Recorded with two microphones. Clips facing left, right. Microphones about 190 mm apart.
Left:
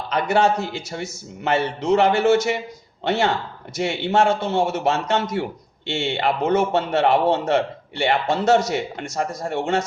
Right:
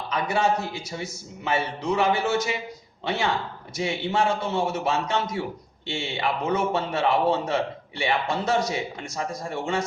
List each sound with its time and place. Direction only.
0.1 s a man's voice: 75° left (ahead or behind)